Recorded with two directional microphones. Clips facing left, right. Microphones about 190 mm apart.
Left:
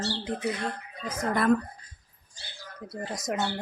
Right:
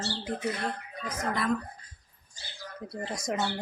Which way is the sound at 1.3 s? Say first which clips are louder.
Left 7 dB; 55° left (ahead or behind).